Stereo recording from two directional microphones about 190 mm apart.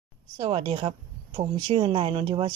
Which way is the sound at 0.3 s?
20° right (ahead or behind).